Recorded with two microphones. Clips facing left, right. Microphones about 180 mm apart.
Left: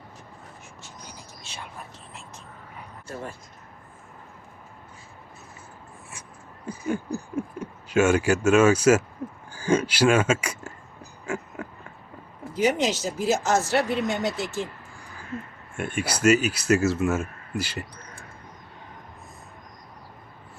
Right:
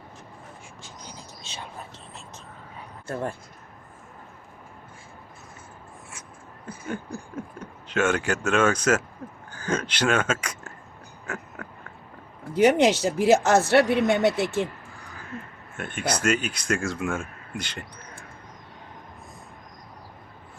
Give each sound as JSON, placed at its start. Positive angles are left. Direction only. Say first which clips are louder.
{"t": 6.8, "sound": "speech", "louder": "left 5 dB", "side_deg": 10}
{"t": 11.3, "sound": "pig", "louder": "left 5 dB", "side_deg": 10}
{"t": 12.5, "sound": "speech", "louder": "right 5 dB", "side_deg": -65}
{"t": 15.8, "sound": "speech", "louder": "left 3 dB", "side_deg": 10}